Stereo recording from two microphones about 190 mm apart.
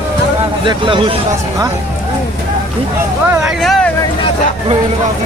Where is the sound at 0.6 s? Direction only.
25° right (ahead or behind).